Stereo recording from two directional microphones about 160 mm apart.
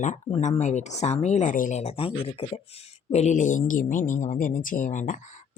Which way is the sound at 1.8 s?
35° left (ahead or behind).